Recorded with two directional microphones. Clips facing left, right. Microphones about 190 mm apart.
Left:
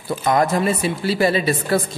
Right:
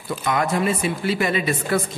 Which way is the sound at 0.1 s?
40° left (ahead or behind).